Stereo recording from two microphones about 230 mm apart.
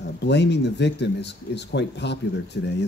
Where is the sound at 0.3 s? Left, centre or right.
Left.